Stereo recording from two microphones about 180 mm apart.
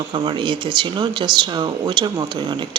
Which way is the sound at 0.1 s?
25° right (ahead or behind).